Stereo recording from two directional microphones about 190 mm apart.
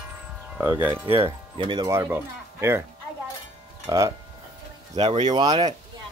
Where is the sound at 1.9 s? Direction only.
10° right (ahead or behind).